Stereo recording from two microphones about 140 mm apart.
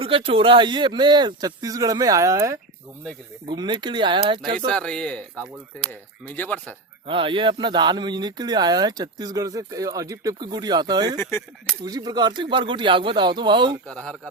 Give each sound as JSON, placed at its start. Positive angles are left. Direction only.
{"t": 0.0, "sound": "speech", "side_deg": -40}
{"t": 3.5, "sound": "speech", "side_deg": -30}
{"t": 4.6, "sound": "speech", "side_deg": 5}
{"t": 7.1, "sound": "speech", "side_deg": -40}
{"t": 11.2, "sound": "speech", "side_deg": 15}
{"t": 11.8, "sound": "speech", "side_deg": -30}
{"t": 13.8, "sound": "speech", "side_deg": 5}